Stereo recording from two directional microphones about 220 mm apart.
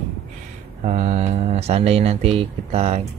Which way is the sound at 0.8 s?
30° right (ahead or behind).